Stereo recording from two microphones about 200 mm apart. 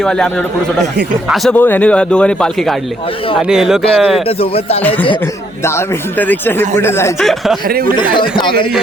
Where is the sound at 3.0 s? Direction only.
25° left (ahead or behind).